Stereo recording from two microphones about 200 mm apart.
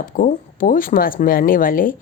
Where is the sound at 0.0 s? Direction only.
40° left (ahead or behind).